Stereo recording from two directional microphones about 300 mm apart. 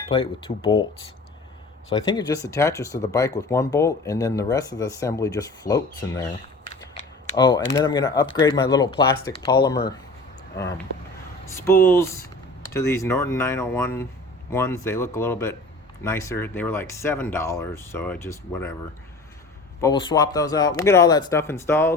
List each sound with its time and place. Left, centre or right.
0.1 s speech: centre
2.0 s speech: centre
7.3 s speech: centre
10.6 s speech: centre
19.8 s speech: centre